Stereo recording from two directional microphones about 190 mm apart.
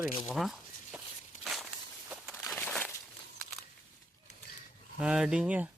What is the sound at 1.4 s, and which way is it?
Walk, centre (ahead or behind).